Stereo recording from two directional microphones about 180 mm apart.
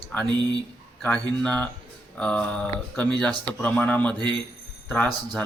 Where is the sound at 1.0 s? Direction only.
5° left (ahead or behind).